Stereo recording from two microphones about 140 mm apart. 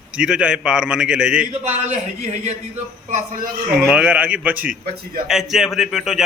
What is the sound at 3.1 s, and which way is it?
Speech, 90° right.